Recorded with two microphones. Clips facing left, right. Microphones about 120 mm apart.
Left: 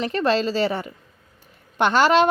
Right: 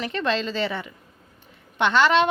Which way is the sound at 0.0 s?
40° left (ahead or behind).